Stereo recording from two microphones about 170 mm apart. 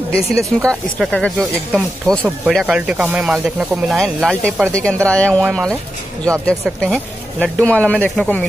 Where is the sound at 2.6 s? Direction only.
5° right (ahead or behind); by 8.5 s 10° left (ahead or behind).